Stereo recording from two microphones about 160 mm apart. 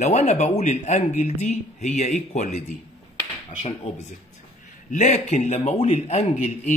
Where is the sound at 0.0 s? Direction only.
45° left (ahead or behind).